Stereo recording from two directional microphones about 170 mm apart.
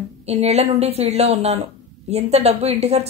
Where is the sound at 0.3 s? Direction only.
40° right (ahead or behind).